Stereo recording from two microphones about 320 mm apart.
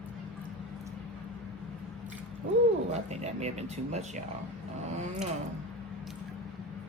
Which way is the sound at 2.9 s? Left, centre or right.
Right.